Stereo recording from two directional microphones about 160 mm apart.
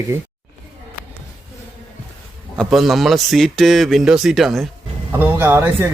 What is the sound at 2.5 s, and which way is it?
A man's voice, centre (ahead or behind).